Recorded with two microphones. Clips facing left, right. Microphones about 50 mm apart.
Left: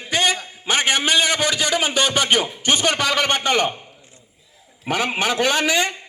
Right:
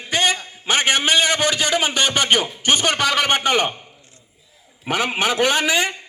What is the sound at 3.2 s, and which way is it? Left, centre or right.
Speech, right.